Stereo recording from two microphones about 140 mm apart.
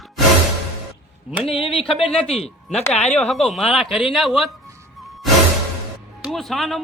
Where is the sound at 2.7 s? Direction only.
50° left (ahead or behind).